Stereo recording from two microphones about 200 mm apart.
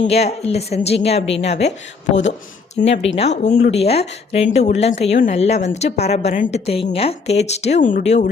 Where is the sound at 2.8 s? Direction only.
30° left (ahead or behind).